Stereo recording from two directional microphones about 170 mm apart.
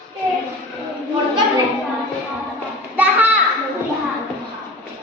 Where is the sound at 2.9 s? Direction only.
10° right (ahead or behind).